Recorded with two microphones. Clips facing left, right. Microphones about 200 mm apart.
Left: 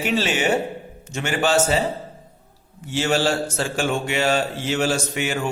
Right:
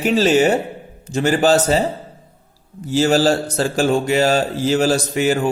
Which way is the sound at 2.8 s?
40° right (ahead or behind).